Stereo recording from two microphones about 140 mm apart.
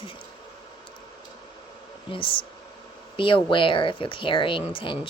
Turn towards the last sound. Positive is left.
turn(degrees=40)  # may be behind; listen again after turning